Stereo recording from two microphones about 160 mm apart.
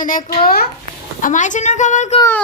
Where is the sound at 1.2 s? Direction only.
50° left (ahead or behind).